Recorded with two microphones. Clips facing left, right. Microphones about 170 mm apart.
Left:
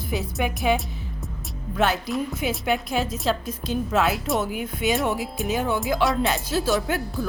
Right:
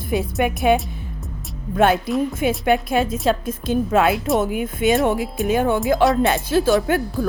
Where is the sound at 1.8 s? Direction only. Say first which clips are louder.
Right 6 dB; 50° right (ahead or behind).